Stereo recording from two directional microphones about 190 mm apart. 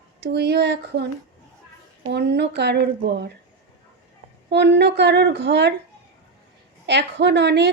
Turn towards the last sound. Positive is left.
turn(degrees=-65)  # may be behind; listen again after turning